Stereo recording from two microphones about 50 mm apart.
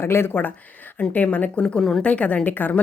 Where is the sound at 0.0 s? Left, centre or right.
Left.